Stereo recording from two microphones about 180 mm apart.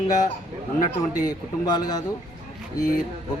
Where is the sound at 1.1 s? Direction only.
20° left (ahead or behind).